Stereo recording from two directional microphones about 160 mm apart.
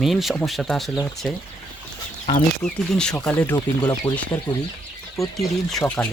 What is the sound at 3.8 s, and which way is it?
Speech, 25° left (ahead or behind).